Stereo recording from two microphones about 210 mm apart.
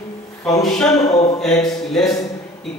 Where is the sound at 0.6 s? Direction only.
Centre (ahead or behind).